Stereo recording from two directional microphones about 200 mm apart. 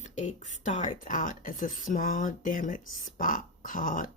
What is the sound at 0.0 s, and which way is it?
Speech, 35° left (ahead or behind).